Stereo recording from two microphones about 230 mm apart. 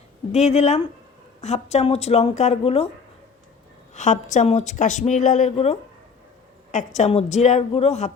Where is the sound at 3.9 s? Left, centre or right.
Left.